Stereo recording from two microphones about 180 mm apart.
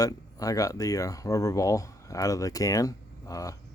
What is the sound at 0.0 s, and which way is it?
Speech, 20° left (ahead or behind).